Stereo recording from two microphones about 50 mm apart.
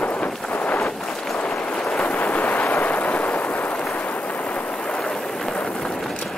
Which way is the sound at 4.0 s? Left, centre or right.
Left.